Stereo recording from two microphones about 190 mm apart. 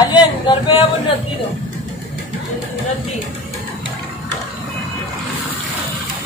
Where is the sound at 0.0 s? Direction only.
25° left (ahead or behind).